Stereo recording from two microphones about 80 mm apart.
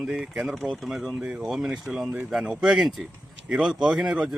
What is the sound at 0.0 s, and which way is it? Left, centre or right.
Speech, centre.